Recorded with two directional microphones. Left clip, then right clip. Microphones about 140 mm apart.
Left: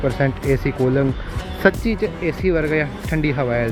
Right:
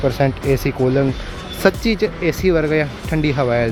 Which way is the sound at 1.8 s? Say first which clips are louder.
Right 4 dB; 35° right (ahead or behind).